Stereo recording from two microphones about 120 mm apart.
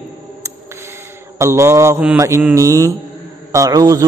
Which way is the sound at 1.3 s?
25° right (ahead or behind).